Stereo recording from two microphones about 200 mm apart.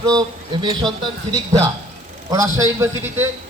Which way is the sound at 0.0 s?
20° right (ahead or behind).